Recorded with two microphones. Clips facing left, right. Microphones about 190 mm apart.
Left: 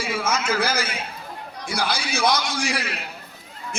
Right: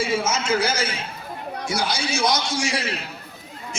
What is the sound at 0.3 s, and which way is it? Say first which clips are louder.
Speech: right 2 dB; 25° right (ahead or behind).